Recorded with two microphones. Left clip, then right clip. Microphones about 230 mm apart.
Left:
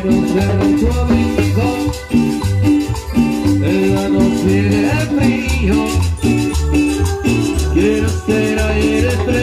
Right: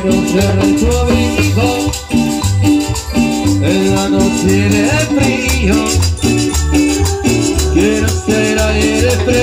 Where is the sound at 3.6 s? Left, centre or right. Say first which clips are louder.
Right 4 dB; right.